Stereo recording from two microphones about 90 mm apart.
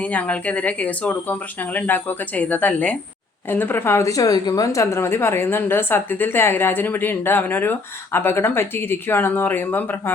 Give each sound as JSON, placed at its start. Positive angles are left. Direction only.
{"t": 0.0, "sound": "a woman's voice", "side_deg": 15}